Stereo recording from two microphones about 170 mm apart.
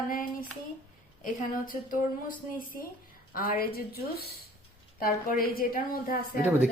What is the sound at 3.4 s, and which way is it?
A woman's voice, 60° left (ahead or behind).